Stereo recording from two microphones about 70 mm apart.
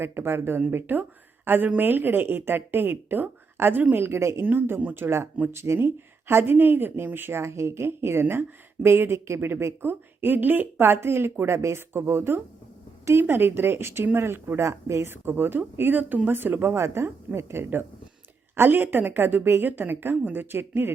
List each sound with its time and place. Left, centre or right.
0.0 s speech: right